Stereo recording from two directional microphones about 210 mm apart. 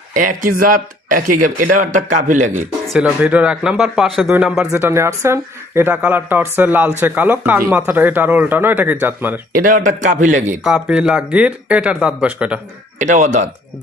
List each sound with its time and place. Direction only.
0.1 s speech: 40° right (ahead or behind)
2.9 s speech: 5° right (ahead or behind)
9.5 s speech: 40° right (ahead or behind)
10.6 s speech: 5° right (ahead or behind)
13.0 s speech: 35° right (ahead or behind)